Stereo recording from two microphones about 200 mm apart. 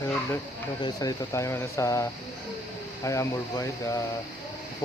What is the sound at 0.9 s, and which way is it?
Speech, 15° left (ahead or behind).